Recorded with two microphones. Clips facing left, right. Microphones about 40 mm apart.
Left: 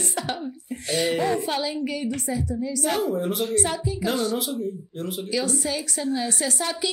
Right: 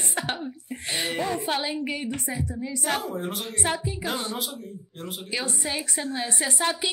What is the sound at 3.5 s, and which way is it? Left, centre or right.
Speech, right.